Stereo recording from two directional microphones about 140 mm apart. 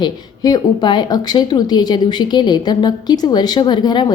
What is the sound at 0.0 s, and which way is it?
A woman's voice, 30° left (ahead or behind).